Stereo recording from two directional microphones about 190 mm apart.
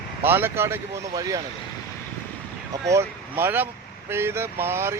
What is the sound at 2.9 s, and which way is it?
Speech, 15° right (ahead or behind).